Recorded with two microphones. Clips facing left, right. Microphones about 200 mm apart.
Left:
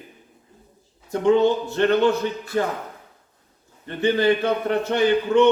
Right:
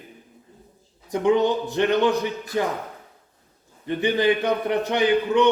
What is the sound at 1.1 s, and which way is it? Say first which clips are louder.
A man's voice: left 2 dB; 15° right (ahead or behind).